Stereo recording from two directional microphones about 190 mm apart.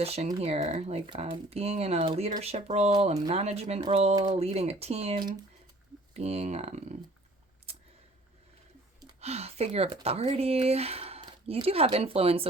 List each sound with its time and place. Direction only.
0.0 s speech: 30° right (ahead or behind)
4.4 s speech: 35° right (ahead or behind)
9.2 s speech: 35° right (ahead or behind)